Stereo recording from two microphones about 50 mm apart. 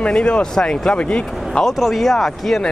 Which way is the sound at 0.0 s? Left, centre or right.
Centre.